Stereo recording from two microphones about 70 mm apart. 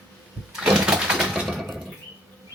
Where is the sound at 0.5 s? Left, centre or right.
Centre.